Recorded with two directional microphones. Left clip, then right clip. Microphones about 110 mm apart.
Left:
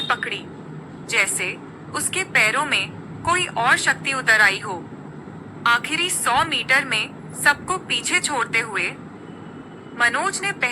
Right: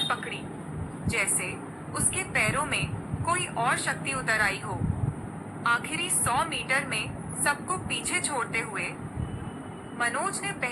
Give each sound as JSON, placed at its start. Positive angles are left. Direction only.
{"t": 1.0, "sound": "a woman's voice", "side_deg": 45}
{"t": 5.6, "sound": "a woman's voice", "side_deg": 40}
{"t": 10.0, "sound": "a woman's voice", "side_deg": 40}